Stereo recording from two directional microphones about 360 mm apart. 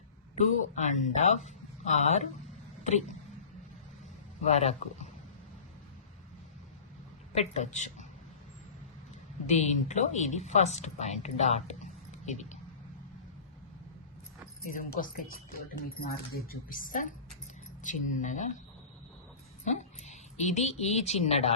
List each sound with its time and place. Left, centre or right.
0.3 s speech: left
4.4 s speech: centre
7.3 s speech: centre
9.5 s speech: centre
14.8 s speech: left
19.6 s speech: centre